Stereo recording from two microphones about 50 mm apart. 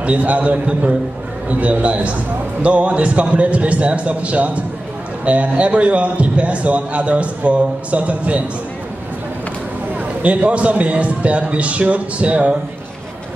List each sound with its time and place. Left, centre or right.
0.0 s a man's voice: right
9.9 s a man's voice: right